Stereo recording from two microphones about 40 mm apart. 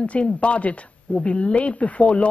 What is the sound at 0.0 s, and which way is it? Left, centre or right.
A woman's voice, left.